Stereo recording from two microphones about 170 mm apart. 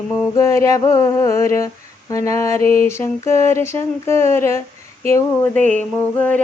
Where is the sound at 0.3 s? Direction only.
15° left (ahead or behind).